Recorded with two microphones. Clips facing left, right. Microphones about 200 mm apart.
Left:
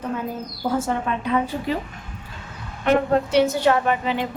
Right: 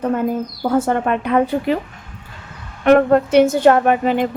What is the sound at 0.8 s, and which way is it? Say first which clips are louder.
A woman's voice: right 6 dB; 60° right (ahead or behind).